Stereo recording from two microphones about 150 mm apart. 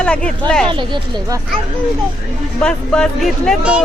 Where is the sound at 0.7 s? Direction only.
35° right (ahead or behind).